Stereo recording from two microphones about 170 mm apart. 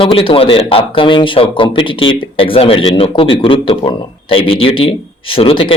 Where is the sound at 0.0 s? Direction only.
30° left (ahead or behind).